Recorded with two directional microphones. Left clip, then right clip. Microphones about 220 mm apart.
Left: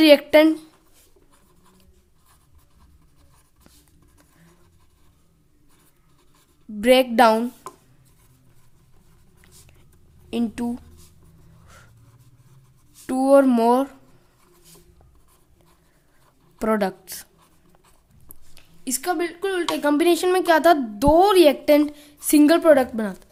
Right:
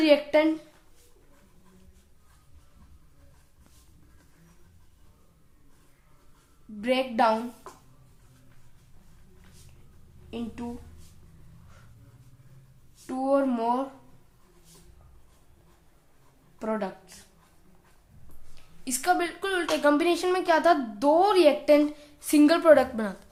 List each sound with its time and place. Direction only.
0.0 s speech: 45° left (ahead or behind)
6.8 s speech: 45° left (ahead or behind)
10.2 s a woman's voice: 50° left (ahead or behind)
13.1 s speech: 50° left (ahead or behind)
16.6 s a woman's voice: 45° left (ahead or behind)
18.5 s speech: 35° left (ahead or behind)